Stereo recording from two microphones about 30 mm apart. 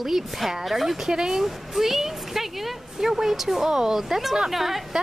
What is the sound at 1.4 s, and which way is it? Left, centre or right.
Speech, centre.